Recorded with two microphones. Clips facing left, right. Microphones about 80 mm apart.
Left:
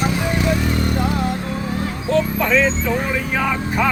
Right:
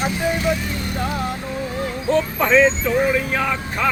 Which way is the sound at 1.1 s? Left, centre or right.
Centre.